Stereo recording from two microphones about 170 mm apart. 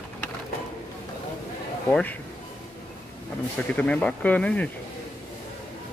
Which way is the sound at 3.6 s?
5° left (ahead or behind).